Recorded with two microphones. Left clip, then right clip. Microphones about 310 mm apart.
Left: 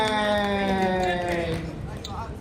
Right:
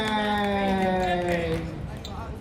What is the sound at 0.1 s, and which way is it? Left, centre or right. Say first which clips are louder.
Music: left 2 dB; centre.